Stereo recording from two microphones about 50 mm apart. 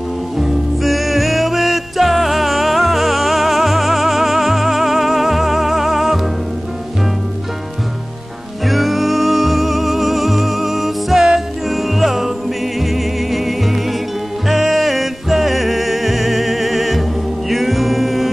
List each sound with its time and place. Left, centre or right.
0.4 s music: centre
8.6 s music: centre